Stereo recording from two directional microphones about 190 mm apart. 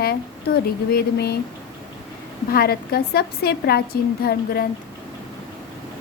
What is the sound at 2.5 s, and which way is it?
A woman's voice, 55° left (ahead or behind).